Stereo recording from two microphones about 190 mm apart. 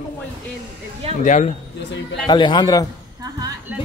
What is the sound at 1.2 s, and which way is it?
Speech, 40° left (ahead or behind).